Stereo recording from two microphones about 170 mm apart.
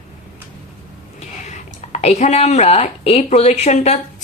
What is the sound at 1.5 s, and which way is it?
Speech, 40° left (ahead or behind).